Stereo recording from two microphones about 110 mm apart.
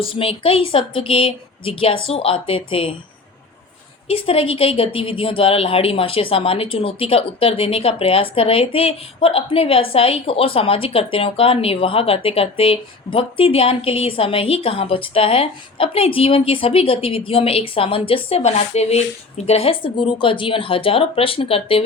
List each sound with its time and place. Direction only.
0.0 s speech: 55° left (ahead or behind)
4.1 s speech: 60° left (ahead or behind)